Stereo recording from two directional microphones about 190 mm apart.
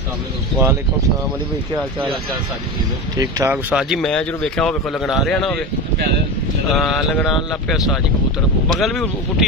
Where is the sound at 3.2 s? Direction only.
15° right (ahead or behind).